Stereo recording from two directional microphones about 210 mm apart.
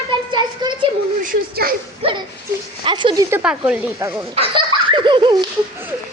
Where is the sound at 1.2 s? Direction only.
45° right (ahead or behind).